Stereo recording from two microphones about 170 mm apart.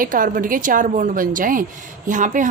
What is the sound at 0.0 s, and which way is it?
A woman's voice, 55° right (ahead or behind).